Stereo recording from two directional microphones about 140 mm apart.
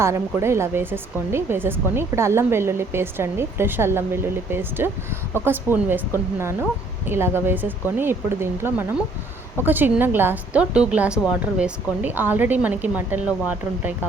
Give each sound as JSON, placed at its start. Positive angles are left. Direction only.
{"t": 0.0, "sound": "a woman's voice", "side_deg": -20}